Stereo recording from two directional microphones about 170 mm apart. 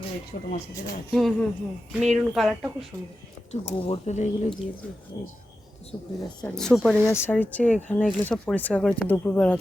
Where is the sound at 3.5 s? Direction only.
35° left (ahead or behind).